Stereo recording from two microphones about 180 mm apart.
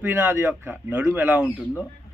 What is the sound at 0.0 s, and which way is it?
Speech, 10° right (ahead or behind).